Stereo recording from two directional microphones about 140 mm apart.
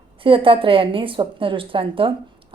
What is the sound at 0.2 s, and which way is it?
A woman's voice, 40° right (ahead or behind).